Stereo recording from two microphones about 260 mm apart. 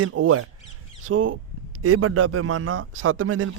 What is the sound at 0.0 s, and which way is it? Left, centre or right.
A man's voice, right.